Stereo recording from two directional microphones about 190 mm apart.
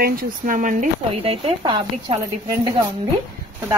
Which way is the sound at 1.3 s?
25° right (ahead or behind).